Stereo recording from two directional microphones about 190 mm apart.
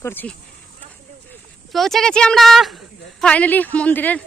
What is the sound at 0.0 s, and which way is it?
Speech, 10° left (ahead or behind).